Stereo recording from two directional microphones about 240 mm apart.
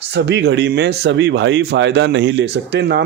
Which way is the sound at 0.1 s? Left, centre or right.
Right.